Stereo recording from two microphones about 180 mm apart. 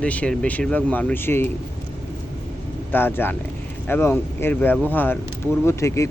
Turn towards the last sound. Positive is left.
turn(degrees=15)  # may be behind; listen again after turning